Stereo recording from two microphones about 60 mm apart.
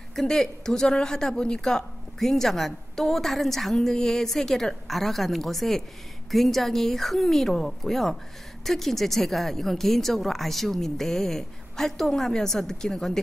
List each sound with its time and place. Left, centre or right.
0.1 s a woman's voice: centre